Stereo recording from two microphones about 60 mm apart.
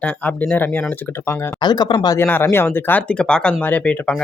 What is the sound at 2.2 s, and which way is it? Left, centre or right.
Speech, left.